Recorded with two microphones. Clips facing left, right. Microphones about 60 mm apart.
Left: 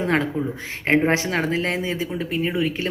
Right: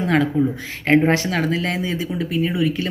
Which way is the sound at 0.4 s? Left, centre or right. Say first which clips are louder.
Right 6 dB; left.